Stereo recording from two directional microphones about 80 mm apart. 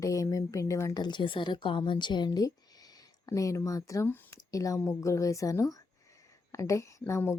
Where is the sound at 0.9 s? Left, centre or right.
Left.